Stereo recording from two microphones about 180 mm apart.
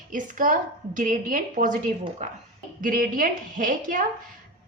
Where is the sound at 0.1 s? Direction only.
45° right (ahead or behind).